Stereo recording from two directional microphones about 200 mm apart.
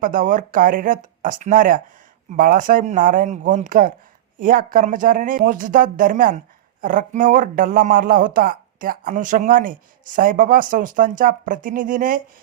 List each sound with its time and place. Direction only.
0.0 s speech: 40° right (ahead or behind)